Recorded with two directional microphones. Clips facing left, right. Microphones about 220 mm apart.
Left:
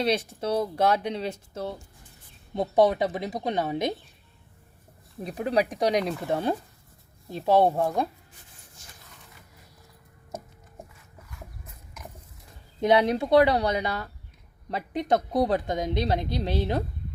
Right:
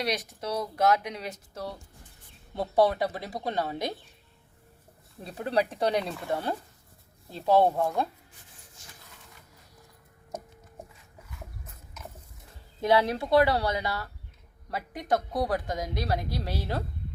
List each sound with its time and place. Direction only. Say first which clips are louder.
0.0 s a woman's voice: left 5 dB; 30° left (ahead or behind)
5.2 s a woman's voice: left 3 dB; 15° left (ahead or behind)
12.8 s a woman's voice: left 3 dB; 20° left (ahead or behind)